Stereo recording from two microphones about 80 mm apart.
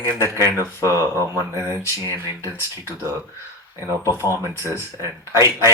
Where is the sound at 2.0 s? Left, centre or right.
Right.